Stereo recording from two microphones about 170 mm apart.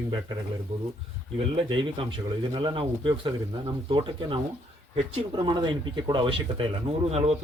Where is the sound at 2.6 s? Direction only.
30° right (ahead or behind).